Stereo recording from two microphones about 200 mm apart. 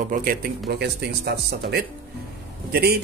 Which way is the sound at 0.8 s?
55° right (ahead or behind).